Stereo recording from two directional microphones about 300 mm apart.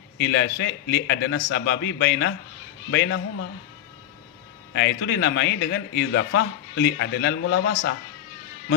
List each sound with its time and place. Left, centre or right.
0.2 s a man's voice: left
4.7 s a man's voice: left